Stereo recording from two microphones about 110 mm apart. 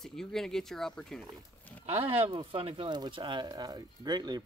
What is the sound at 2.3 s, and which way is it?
Speech, 50° right (ahead or behind).